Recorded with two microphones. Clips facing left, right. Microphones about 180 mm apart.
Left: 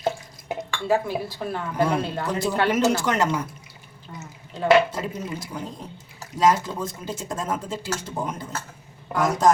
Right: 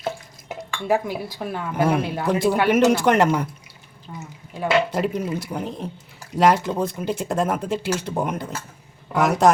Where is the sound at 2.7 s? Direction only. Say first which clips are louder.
Right 7 dB; 60° right (ahead or behind).